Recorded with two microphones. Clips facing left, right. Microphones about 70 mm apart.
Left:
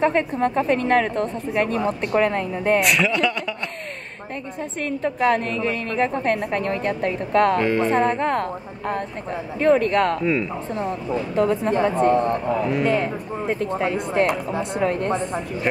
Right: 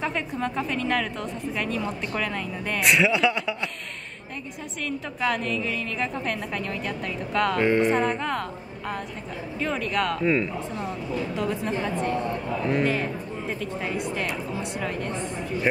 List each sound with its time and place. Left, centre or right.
0.0 s a woman's voice: left
2.8 s speech: centre
4.8 s a woman's voice: left
7.5 s speech: centre
8.1 s a woman's voice: left
10.2 s speech: centre
11.3 s speech: left
15.7 s speech: centre